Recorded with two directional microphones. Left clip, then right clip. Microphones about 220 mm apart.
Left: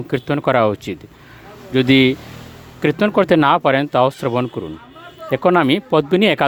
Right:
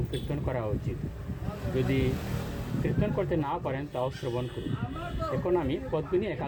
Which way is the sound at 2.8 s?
65° left (ahead or behind).